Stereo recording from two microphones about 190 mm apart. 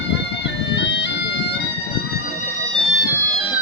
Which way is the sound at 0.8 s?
65° left (ahead or behind).